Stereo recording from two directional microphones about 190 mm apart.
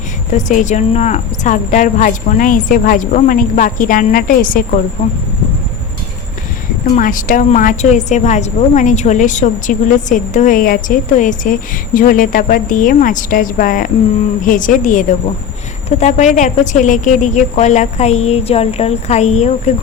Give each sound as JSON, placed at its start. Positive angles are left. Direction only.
{"t": 0.3, "sound": "a woman's voice", "side_deg": 40}
{"t": 6.9, "sound": "a woman's voice", "side_deg": 45}